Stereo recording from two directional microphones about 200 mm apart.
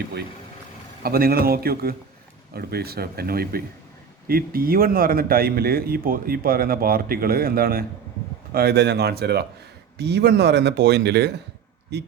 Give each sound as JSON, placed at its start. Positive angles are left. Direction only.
{"t": 1.0, "sound": "a man's voice", "side_deg": -50}